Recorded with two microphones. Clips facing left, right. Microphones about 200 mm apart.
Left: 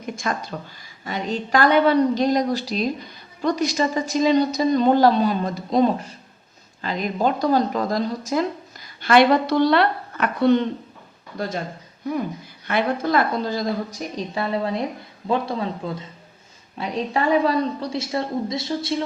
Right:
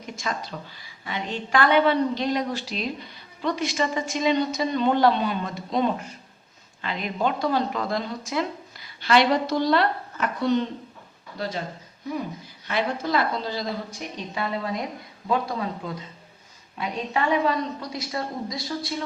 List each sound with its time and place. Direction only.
0.0 s a woman's voice: 50° left (ahead or behind)
11.3 s a woman's voice: 50° left (ahead or behind)
12.6 s a woman's voice: 55° left (ahead or behind); by 19.0 s 25° left (ahead or behind)